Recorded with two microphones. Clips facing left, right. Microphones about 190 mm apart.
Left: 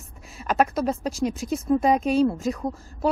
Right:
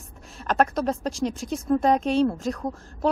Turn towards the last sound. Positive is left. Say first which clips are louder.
# even
turn(degrees=5)  # may be behind; listen again after turning